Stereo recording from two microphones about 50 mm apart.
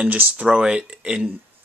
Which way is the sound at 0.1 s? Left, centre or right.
Right.